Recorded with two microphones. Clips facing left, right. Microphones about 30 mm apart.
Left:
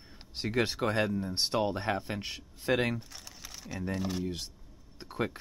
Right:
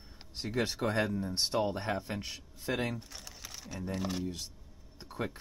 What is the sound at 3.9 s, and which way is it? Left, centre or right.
Speech, centre.